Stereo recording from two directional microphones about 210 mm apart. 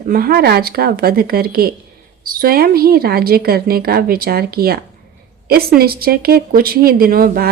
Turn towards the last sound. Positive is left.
turn(degrees=-45)  # may be behind; listen again after turning